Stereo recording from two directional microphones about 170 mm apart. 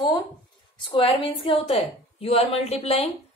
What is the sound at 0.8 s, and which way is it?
A woman's voice, 30° left (ahead or behind).